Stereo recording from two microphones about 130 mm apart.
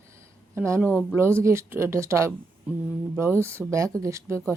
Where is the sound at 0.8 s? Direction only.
10° left (ahead or behind).